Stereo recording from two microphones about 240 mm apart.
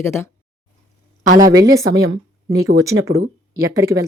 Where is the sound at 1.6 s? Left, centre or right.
Centre.